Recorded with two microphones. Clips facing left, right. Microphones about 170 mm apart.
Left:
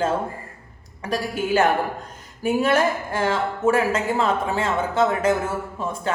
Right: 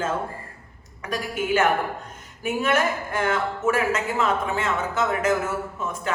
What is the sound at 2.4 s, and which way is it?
Speech, 35° left (ahead or behind).